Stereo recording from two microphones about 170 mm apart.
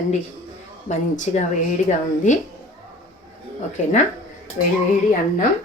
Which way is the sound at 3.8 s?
45° left (ahead or behind).